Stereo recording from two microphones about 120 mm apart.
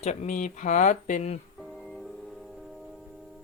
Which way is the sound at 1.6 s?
Centre (ahead or behind).